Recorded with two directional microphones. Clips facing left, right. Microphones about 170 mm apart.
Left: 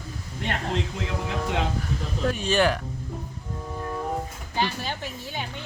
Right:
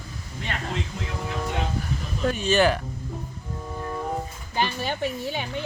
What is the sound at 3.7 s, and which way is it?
Train, centre (ahead or behind).